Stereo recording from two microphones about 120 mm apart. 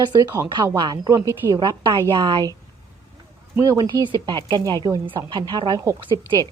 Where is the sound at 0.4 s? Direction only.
35° right (ahead or behind).